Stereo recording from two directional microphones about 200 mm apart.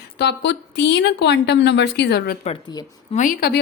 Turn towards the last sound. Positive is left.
turn(degrees=45)  # may be behind; listen again after turning